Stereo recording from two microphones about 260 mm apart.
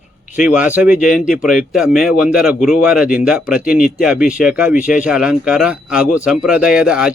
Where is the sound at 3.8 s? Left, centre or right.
Left.